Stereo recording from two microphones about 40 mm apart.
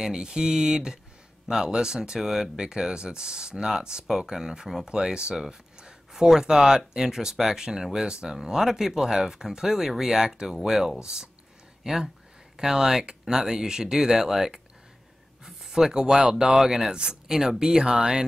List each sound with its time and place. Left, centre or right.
0.0 s speech: centre
6.1 s speech: centre